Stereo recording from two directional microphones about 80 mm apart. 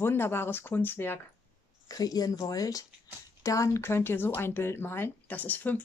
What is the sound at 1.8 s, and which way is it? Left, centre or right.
Speech, left.